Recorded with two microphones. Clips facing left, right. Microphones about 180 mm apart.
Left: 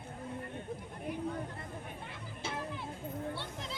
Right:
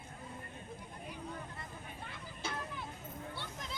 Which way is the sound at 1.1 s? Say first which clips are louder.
Left 11 dB; 55° left (ahead or behind).